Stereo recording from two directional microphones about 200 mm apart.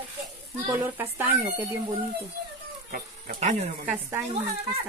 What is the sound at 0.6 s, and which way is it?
Speech, 10° right (ahead or behind).